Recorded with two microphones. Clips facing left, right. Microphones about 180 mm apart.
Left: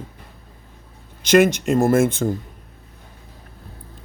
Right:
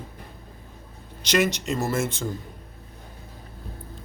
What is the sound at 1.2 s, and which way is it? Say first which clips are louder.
Speech: left 8 dB; 50° left (ahead or behind).